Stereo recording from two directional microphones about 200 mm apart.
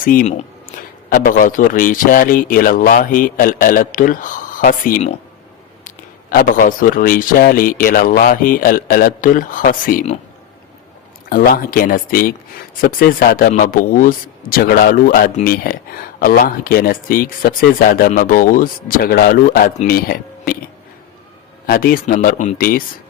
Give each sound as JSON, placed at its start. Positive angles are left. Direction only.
{"t": 0.0, "sound": "speech", "side_deg": 45}
{"t": 6.3, "sound": "speech", "side_deg": 45}
{"t": 11.3, "sound": "speech", "side_deg": 45}
{"t": 21.7, "sound": "speech", "side_deg": 45}